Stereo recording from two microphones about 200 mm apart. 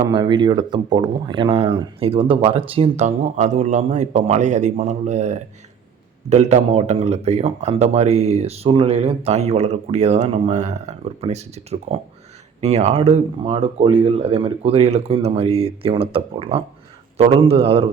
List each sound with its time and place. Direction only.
0.0 s speech: 25° right (ahead or behind)